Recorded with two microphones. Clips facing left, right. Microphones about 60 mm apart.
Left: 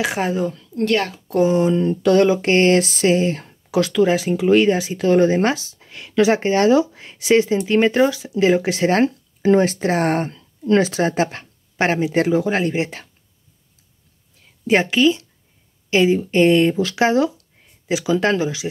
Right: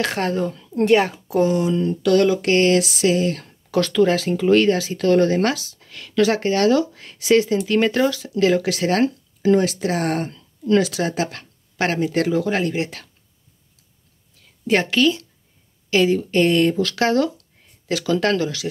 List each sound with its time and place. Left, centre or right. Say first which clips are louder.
0.0 s speech: left 1 dB; centre
0.8 s a woman's voice: right 3 dB; centre
1.5 s speech: left 3 dB; left
3.7 s speech: left 1 dB; centre; by 13.1 s left
14.7 s speech: left 2 dB; centre